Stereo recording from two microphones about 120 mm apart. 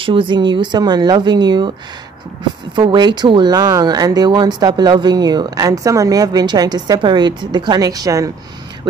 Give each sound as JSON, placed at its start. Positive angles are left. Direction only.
{"t": 0.0, "sound": "speech", "side_deg": -45}
{"t": 2.7, "sound": "speech", "side_deg": -40}